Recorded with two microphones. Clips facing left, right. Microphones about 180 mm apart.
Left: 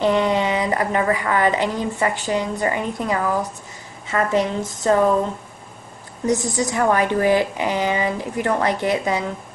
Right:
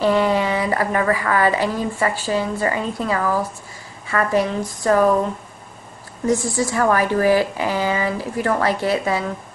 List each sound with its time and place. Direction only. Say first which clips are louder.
0.0 s a woman's voice: right 1 dB; 20° left (ahead or behind)
6.2 s a woman's voice: right 1 dB; 20° left (ahead or behind)